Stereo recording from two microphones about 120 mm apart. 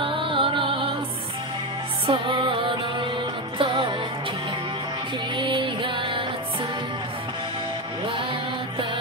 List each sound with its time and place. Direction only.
0.0 s music: 45° right (ahead or behind)
2.0 s music: 50° right (ahead or behind)
5.3 s music: 45° right (ahead or behind)
8.0 s music: 45° right (ahead or behind)